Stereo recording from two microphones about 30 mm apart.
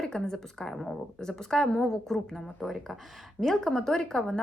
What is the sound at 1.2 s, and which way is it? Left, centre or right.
Speech, left.